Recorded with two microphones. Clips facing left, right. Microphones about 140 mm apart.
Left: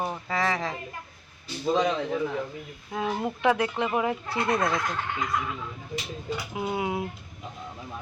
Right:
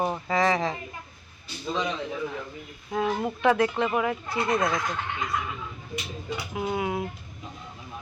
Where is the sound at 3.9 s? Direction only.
25° left (ahead or behind).